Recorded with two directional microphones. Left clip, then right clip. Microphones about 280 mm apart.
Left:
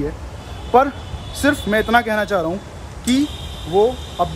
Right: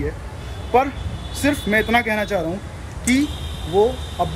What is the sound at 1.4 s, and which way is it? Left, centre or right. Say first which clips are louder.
Speech: left 2 dB; centre.